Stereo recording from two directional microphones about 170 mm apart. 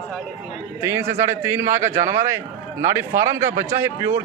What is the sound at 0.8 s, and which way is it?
Speech, 15° right (ahead or behind).